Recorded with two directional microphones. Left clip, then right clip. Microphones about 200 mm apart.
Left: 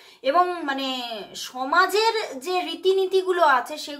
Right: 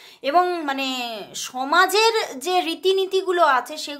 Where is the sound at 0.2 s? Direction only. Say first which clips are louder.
Right 1 dB; 30° right (ahead or behind).